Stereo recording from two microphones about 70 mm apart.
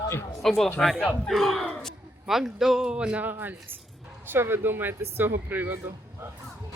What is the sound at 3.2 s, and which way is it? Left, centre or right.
Speech, right.